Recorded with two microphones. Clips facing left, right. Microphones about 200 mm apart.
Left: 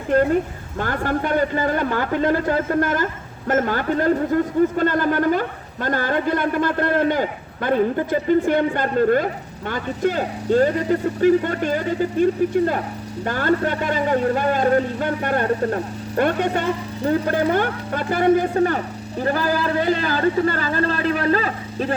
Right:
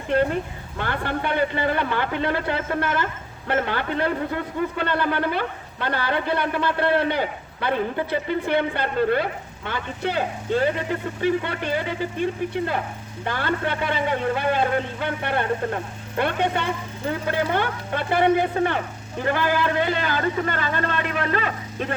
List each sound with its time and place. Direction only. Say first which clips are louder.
0.8 s a man's voice: left 4 dB; 40° left (ahead or behind)